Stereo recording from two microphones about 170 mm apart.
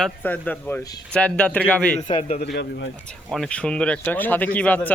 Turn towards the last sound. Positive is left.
turn(degrees=10)  # may be behind; listen again after turning